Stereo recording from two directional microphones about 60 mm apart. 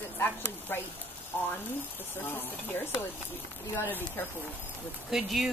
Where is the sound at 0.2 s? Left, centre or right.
Left.